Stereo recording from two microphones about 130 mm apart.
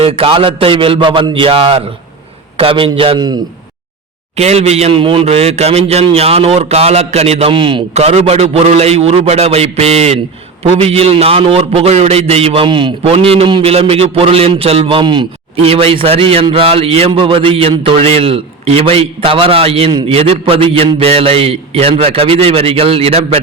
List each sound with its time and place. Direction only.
0.0 s a man's voice: 45° right (ahead or behind)
4.4 s a man's voice: 55° right (ahead or behind); by 7.9 s 40° right (ahead or behind)
7.9 s a man's voice: 55° right (ahead or behind)
15.0 s a man's voice: 35° right (ahead or behind)